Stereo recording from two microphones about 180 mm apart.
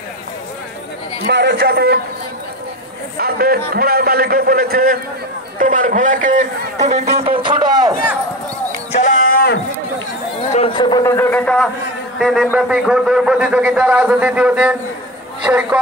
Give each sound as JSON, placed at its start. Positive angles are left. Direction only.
{"t": 1.2, "sound": "a man's voice", "side_deg": -70}
{"t": 3.2, "sound": "a man's voice", "side_deg": -60}
{"t": 7.4, "sound": "speech", "side_deg": -25}
{"t": 8.9, "sound": "livestock", "side_deg": 45}
{"t": 10.5, "sound": "a man's voice", "side_deg": 30}